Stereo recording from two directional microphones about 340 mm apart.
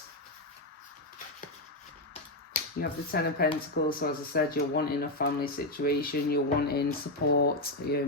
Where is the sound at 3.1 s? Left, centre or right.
Left.